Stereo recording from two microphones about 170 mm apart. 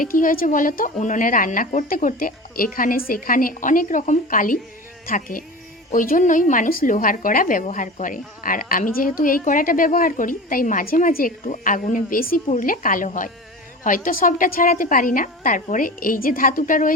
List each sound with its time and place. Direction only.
0.0 s a woman's voice: 55° left (ahead or behind)